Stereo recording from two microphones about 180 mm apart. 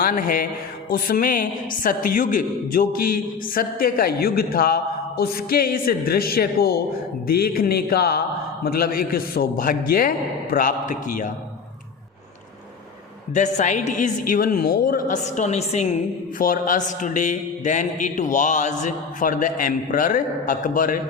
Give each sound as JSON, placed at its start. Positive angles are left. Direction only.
{"t": 0.0, "sound": "a woman's voice", "side_deg": 50}
{"t": 13.3, "sound": "speech", "side_deg": 40}
{"t": 16.4, "sound": "speech", "side_deg": 50}